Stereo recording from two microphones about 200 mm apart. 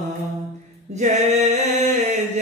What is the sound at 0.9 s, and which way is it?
Mantra, 35° right (ahead or behind).